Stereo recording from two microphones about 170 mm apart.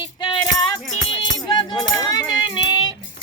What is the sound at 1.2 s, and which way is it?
Music, 25° left (ahead or behind).